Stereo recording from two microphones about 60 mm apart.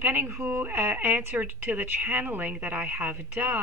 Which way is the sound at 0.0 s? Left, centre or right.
Right.